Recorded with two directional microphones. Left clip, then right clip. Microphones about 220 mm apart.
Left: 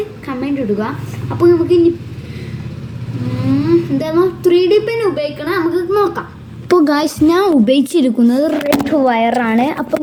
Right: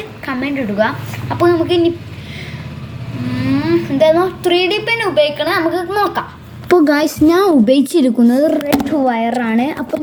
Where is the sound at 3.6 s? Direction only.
5° left (ahead or behind).